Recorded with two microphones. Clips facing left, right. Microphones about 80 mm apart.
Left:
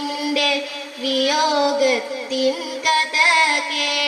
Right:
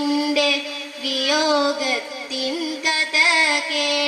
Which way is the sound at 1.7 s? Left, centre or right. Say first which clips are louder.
Left 7 dB; left.